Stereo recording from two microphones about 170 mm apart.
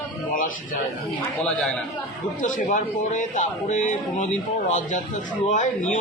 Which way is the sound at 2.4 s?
50° left (ahead or behind).